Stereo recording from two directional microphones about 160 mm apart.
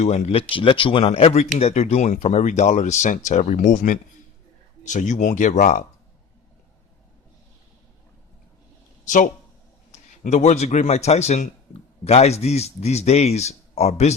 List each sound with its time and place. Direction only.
0.0 s speech: 40° left (ahead or behind)
9.0 s speech: 55° left (ahead or behind)
9.9 s a man's voice: 45° left (ahead or behind)